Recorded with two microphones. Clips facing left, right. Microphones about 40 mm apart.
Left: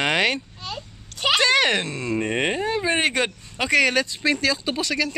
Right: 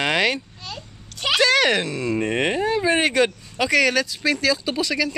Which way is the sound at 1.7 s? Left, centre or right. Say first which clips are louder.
Right 2 dB; centre.